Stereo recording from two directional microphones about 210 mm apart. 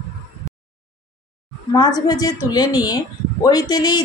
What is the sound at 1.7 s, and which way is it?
Speech, 20° left (ahead or behind).